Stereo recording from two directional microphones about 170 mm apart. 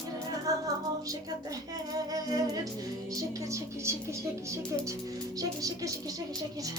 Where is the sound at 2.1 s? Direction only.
20° right (ahead or behind).